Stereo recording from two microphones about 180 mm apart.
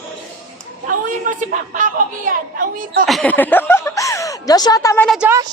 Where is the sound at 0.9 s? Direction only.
45° right (ahead or behind).